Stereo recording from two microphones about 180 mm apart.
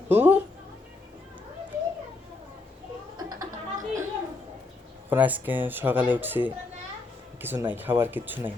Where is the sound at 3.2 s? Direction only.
20° right (ahead or behind).